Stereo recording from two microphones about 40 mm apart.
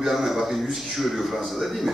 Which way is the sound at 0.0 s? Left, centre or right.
Centre.